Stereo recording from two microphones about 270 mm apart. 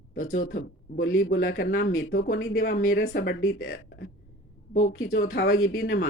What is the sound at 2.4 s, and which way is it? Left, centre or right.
Speech, left.